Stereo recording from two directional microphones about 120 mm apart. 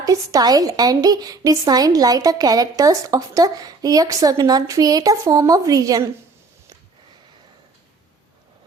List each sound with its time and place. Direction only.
0.0 s a woman's voice: 30° right (ahead or behind)